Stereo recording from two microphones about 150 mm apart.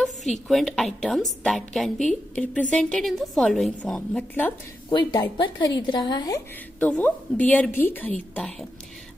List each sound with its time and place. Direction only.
0.0 s a woman's voice: centre (ahead or behind)
4.8 s a woman's voice: 25° left (ahead or behind)
6.8 s a woman's voice: 10° left (ahead or behind)